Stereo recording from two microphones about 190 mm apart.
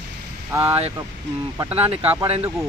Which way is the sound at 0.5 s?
15° right (ahead or behind).